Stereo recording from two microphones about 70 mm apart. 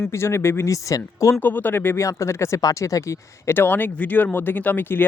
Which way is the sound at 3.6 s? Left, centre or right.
Left.